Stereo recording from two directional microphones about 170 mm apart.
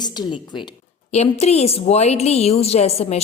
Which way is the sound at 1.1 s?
40° left (ahead or behind).